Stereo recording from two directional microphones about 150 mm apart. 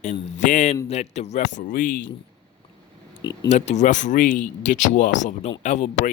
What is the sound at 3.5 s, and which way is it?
Speech, 50° left (ahead or behind).